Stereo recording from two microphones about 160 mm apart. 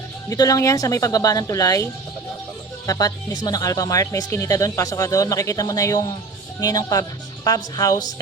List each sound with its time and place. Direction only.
0.3 s speech: 20° left (ahead or behind)